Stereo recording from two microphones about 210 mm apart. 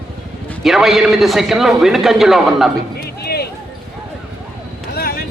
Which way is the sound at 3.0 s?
50° left (ahead or behind).